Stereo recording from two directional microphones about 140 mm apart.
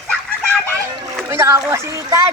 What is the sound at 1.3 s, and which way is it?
Splash, 20° right (ahead or behind).